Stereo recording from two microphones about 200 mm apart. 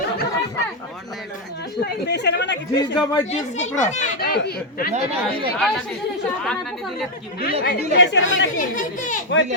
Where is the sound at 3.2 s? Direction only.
35° left (ahead or behind).